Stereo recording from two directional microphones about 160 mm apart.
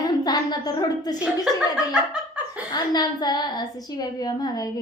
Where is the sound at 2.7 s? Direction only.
25° left (ahead or behind).